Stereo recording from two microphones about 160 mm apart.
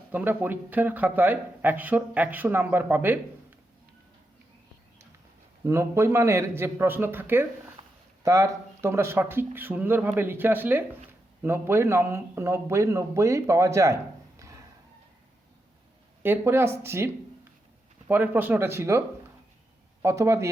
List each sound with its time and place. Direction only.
0.1 s speech: 10° right (ahead or behind)
5.6 s speech: 15° right (ahead or behind)
16.2 s speech: 15° right (ahead or behind)